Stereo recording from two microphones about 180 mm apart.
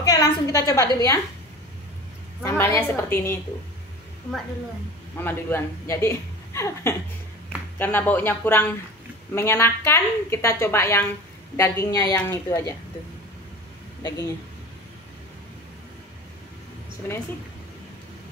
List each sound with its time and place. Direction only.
0.0 s a woman's voice: 20° left (ahead or behind)
2.4 s a woman's voice: 15° left (ahead or behind)
5.2 s a woman's voice: 10° left (ahead or behind)
14.0 s a woman's voice: 20° left (ahead or behind)
17.0 s a woman's voice: 10° left (ahead or behind)